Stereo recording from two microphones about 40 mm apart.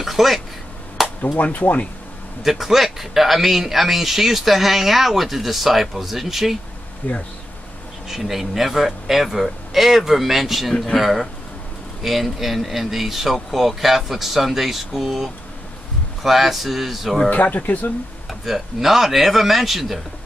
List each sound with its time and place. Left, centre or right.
0.0 s a sound: centre
1.2 s speech: left
2.4 s speech: centre
7.0 s speech: left
8.1 s speech: centre
17.3 s speech: left
18.4 s speech: centre